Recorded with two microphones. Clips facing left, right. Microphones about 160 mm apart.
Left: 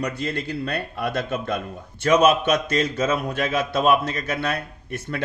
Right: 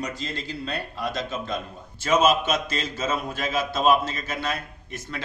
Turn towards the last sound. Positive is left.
turn(degrees=60)  # may be behind; listen again after turning